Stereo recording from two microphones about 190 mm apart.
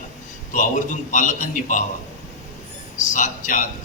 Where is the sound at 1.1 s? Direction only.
40° left (ahead or behind).